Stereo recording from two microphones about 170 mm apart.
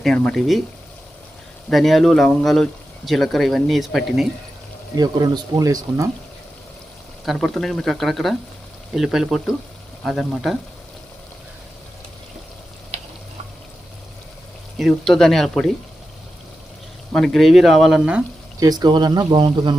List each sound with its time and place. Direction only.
0.0 s speech: 5° left (ahead or behind)
1.7 s speech: centre (ahead or behind)
4.9 s speech: 25° right (ahead or behind)
7.3 s speech: centre (ahead or behind)
14.8 s speech: centre (ahead or behind)
17.1 s speech: 5° left (ahead or behind)
18.6 s speech: 25° right (ahead or behind)